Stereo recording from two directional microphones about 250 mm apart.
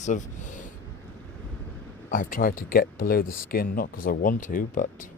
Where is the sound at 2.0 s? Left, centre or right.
Left.